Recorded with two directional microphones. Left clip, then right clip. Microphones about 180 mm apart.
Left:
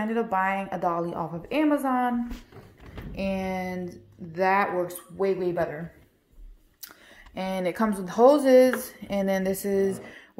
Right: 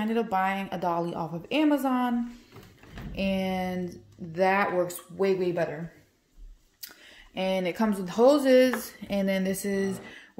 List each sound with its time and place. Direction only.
0.2 s speech: 20° right (ahead or behind)
3.2 s speech: 25° right (ahead or behind)
7.3 s speech: 10° right (ahead or behind)